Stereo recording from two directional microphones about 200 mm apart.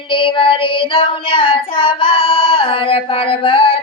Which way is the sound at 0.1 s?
25° left (ahead or behind).